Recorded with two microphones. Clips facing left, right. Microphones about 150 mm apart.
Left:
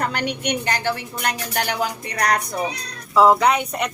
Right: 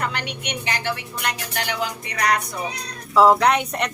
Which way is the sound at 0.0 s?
45° left (ahead or behind).